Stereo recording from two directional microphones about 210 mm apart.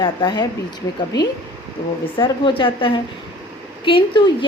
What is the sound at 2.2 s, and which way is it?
A woman's voice, 25° left (ahead or behind).